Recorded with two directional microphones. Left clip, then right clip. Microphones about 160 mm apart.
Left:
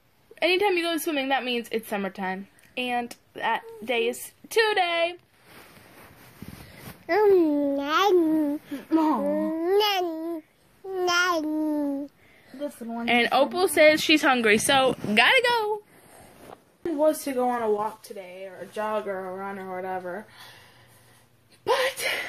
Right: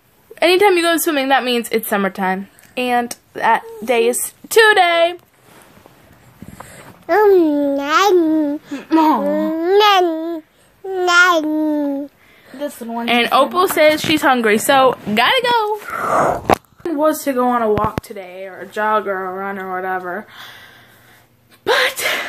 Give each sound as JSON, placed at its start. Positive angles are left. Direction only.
{"t": 0.3, "sound": "a woman's voice", "side_deg": -25}
{"t": 7.1, "sound": "a child's voice", "side_deg": -10}
{"t": 7.8, "sound": "a child's voice", "side_deg": 0}
{"t": 13.7, "sound": "a child's voice", "side_deg": -15}
{"t": 14.3, "sound": "speech", "side_deg": -35}
{"t": 15.2, "sound": "a woman's voice", "side_deg": -25}
{"t": 16.8, "sound": "a woman's voice", "side_deg": -25}
{"t": 21.6, "sound": "speech", "side_deg": -30}